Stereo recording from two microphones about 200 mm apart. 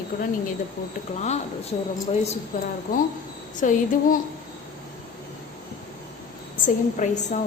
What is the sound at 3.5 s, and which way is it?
Speech, 40° left (ahead or behind).